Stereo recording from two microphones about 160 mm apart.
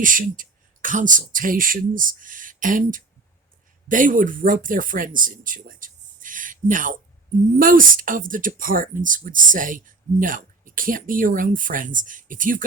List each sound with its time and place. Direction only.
0.0 s speech: 55° right (ahead or behind)